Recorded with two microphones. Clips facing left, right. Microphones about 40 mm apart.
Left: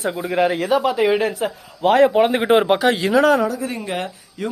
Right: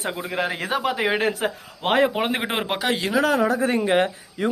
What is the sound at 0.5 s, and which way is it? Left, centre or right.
Speech, right.